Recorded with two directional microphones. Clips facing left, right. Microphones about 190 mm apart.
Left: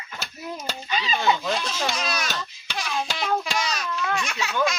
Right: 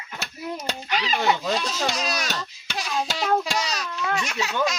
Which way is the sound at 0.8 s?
75° right (ahead or behind).